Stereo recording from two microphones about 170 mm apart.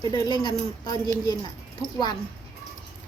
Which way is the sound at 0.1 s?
25° left (ahead or behind).